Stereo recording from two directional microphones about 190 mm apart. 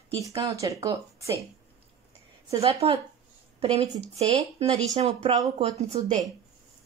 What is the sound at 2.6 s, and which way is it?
A woman's voice, 30° right (ahead or behind).